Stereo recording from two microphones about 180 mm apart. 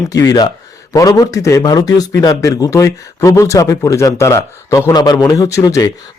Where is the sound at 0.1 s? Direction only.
20° left (ahead or behind).